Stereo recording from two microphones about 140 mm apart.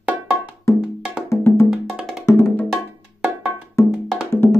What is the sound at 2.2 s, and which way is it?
Wood block, 20° left (ahead or behind).